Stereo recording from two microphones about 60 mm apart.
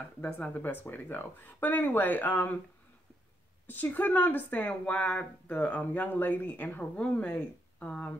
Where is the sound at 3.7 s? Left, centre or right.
Left.